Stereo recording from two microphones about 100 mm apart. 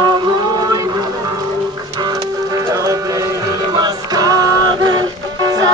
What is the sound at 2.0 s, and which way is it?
Music, 45° right (ahead or behind).